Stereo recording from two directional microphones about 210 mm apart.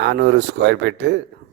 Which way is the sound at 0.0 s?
55° right (ahead or behind).